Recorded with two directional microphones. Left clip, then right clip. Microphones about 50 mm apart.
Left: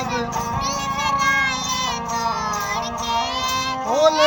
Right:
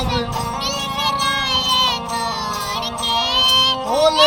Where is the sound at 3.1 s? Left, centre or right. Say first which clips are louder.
Right 7 dB; right.